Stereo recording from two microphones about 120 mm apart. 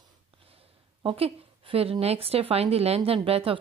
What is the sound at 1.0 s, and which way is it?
A woman's voice, 50° right (ahead or behind).